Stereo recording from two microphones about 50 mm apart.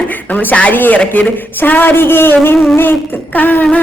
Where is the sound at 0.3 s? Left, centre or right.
Left.